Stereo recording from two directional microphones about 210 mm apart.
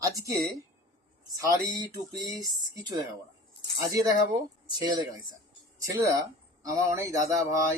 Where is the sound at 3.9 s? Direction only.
15° right (ahead or behind).